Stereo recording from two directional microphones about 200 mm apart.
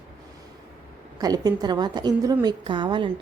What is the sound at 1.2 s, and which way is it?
Speech, 20° right (ahead or behind).